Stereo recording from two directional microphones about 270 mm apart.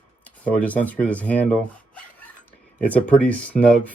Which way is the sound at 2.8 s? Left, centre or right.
Centre.